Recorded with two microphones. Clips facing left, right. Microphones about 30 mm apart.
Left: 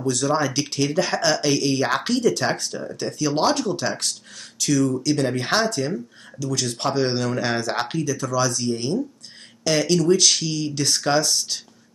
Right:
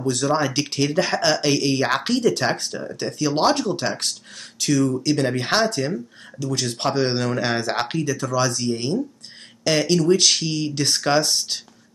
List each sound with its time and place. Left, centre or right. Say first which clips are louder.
0.0 s speech: right 1 dB; centre